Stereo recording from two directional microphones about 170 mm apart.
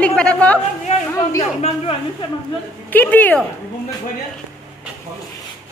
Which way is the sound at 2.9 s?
10° left (ahead or behind).